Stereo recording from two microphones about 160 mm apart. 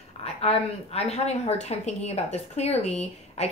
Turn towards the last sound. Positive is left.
turn(degrees=40)  # may be behind; listen again after turning